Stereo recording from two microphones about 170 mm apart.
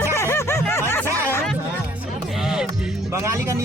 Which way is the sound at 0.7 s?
15° left (ahead or behind).